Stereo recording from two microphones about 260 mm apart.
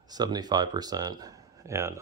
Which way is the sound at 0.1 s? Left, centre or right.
Centre.